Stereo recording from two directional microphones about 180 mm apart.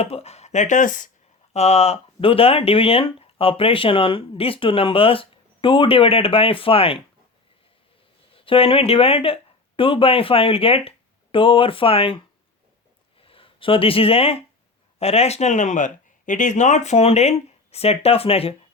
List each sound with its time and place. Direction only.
0.0 s speech: 35° left (ahead or behind)
1.5 s speech: 35° left (ahead or behind)
8.3 s speech: 30° left (ahead or behind)